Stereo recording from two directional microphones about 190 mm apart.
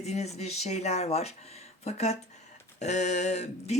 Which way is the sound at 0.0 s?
35° left (ahead or behind).